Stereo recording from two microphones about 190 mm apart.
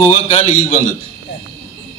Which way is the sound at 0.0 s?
35° left (ahead or behind).